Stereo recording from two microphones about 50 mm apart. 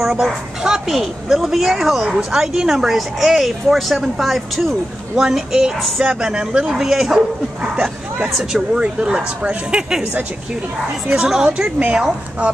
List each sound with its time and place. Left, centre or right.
0.0 s a woman's voice: centre
5.8 s a woman's voice: centre
6.0 s speech: centre
11.1 s speech: centre